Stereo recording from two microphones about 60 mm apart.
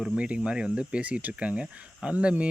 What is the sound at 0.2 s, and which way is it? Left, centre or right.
Speech, centre.